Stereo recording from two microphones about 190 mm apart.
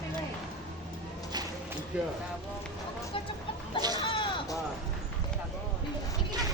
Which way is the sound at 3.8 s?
20° right (ahead or behind).